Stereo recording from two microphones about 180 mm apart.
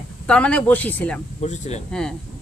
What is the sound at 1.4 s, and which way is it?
Speech, 40° left (ahead or behind).